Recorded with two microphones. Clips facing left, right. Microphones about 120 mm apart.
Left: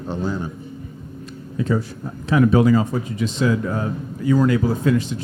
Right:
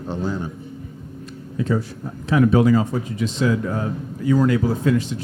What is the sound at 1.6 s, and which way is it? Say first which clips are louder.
Speech: left 1 dB; 25° left (ahead or behind).